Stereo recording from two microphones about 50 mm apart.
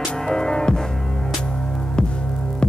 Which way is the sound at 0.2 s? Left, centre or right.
Centre.